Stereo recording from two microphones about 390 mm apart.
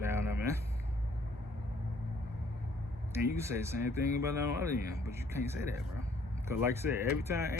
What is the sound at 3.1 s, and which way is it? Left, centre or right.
Speech, centre.